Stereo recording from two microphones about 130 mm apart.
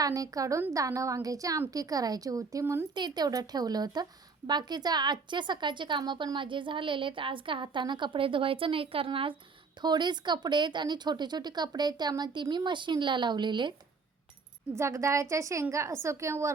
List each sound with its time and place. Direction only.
0.0 s a woman's voice: 25° right (ahead or behind)
14.7 s a woman's voice: 20° right (ahead or behind)